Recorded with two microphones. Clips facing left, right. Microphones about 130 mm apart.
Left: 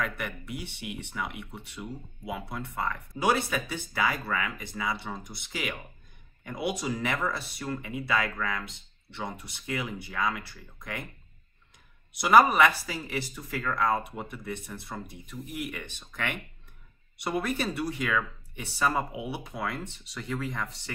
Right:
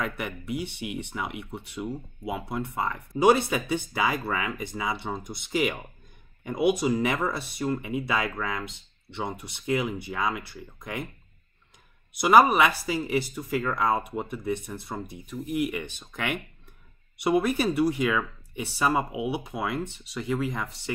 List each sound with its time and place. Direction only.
0.0 s speech: 20° right (ahead or behind)
12.1 s speech: 15° right (ahead or behind)